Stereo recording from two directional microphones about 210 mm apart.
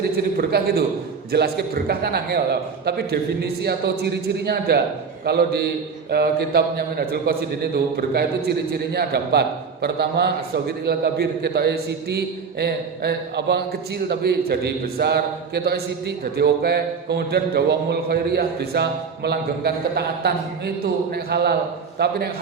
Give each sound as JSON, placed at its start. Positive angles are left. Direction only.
{"t": 0.3, "sound": "a man's voice", "side_deg": -50}